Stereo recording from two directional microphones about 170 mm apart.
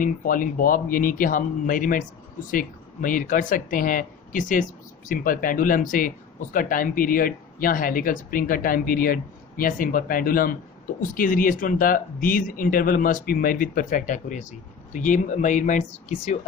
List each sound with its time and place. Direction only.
0.0 s speech: 55° left (ahead or behind)